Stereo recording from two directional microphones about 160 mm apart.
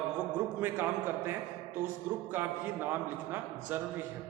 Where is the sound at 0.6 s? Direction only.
15° right (ahead or behind).